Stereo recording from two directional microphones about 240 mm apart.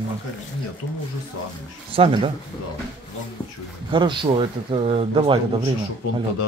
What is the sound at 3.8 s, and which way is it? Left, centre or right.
Speech, right.